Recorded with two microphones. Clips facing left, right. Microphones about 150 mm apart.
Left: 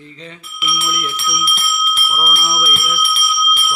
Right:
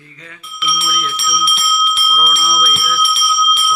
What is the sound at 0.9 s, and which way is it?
Speech, 10° left (ahead or behind).